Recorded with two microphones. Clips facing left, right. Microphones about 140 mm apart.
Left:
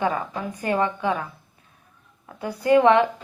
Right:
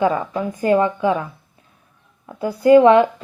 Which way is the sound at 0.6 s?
30° right (ahead or behind).